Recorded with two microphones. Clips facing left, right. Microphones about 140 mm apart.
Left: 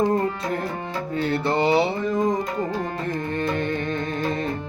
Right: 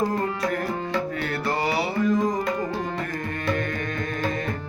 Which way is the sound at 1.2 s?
25° left (ahead or behind).